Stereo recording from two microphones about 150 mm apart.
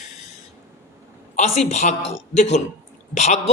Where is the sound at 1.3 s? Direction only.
50° left (ahead or behind).